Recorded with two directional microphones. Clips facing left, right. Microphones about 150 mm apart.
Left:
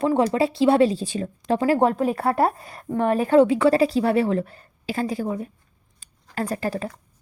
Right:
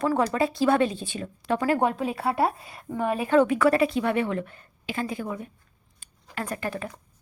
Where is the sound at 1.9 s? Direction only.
45° left (ahead or behind).